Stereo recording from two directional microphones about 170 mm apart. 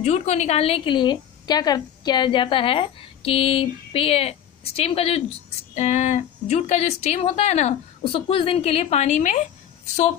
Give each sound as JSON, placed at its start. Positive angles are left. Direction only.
{"t": 0.0, "sound": "a woman's voice", "side_deg": 40}